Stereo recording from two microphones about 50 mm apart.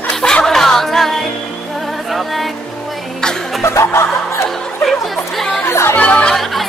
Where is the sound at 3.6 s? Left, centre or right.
Left.